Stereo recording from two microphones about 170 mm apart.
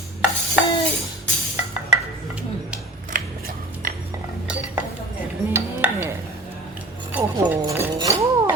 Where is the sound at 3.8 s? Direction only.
60° right (ahead or behind).